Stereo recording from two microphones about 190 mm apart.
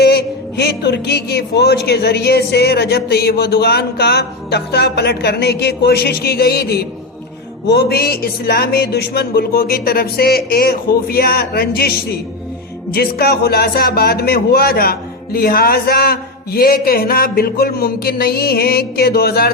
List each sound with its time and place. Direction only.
0.0 s a man's voice: 60° left (ahead or behind)